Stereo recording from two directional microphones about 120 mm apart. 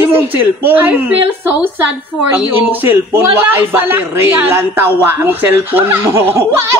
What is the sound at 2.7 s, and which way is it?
A man's voice, 15° right (ahead or behind).